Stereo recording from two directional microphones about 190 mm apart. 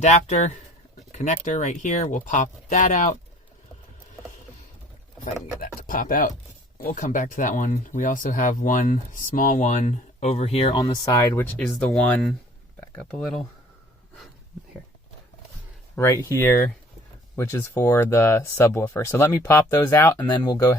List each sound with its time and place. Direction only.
0.0 s speech: 40° left (ahead or behind)
5.5 s speech: 45° left (ahead or behind); by 12.0 s 5° left (ahead or behind)
13.1 s speech: 5° left (ahead or behind)
16.0 s speech: 15° left (ahead or behind)